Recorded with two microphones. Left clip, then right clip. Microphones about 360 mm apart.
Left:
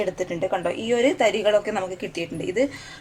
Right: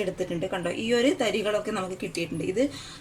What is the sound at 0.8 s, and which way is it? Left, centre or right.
A woman's voice, centre.